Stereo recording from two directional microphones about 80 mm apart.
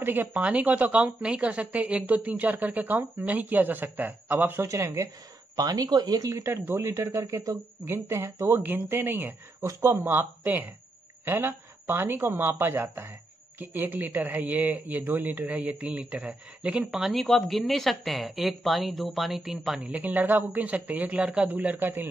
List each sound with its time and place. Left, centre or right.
0.0 s a woman's voice: right
4.6 s speech: right
5.6 s speech: right
6.5 s a woman's voice: right
6.8 s a woman's voice: right
9.7 s speech: right
10.0 s a woman's voice: right; by 19.8 s centre
19.8 s a woman's voice: centre